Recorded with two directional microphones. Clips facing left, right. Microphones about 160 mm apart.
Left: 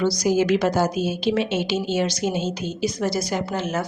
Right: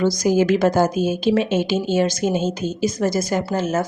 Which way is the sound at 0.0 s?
50° right (ahead or behind).